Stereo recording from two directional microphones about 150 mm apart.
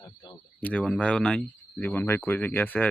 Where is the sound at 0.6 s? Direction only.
10° left (ahead or behind).